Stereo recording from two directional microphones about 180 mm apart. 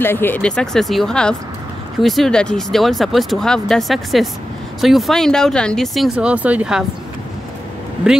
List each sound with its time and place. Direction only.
0.0 s speech: 10° left (ahead or behind); by 6.9 s 5° right (ahead or behind)
8.0 s speech: 5° right (ahead or behind)